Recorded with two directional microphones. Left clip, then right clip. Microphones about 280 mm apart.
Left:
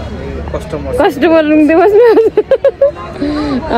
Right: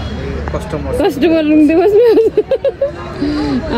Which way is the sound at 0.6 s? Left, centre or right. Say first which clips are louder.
Left 4 dB; centre.